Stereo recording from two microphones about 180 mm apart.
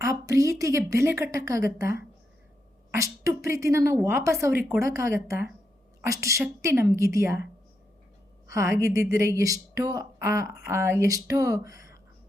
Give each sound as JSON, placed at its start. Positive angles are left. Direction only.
{"t": 0.0, "sound": "a woman's voice", "side_deg": -15}
{"t": 8.4, "sound": "a woman's voice", "side_deg": -15}